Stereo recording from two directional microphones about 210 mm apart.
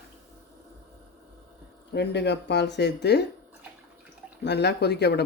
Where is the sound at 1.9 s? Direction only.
55° left (ahead or behind).